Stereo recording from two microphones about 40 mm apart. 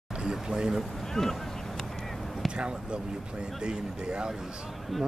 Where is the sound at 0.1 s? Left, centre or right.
Centre.